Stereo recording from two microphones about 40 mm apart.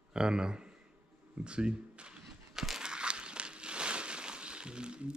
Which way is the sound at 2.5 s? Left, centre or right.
Centre.